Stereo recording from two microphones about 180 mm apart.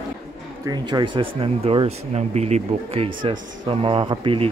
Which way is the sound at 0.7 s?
25° right (ahead or behind).